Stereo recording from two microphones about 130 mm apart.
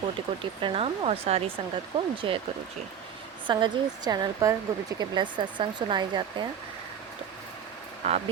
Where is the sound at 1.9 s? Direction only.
35° right (ahead or behind).